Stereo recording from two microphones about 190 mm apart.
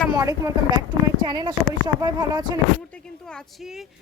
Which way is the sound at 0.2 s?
20° right (ahead or behind).